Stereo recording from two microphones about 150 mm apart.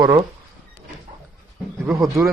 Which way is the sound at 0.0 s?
30° right (ahead or behind).